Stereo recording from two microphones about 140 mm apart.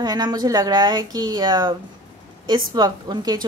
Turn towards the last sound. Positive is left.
turn(degrees=-30)  # may be behind; listen again after turning